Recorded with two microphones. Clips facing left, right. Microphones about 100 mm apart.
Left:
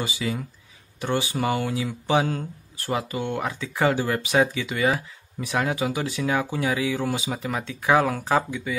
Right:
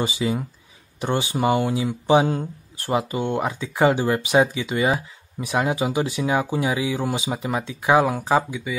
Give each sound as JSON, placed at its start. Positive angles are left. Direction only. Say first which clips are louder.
{"t": 0.0, "sound": "speech", "louder": "right 5 dB", "side_deg": -25}